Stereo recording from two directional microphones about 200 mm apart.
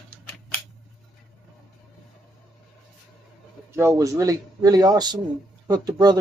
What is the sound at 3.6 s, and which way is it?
A man's voice, 15° right (ahead or behind).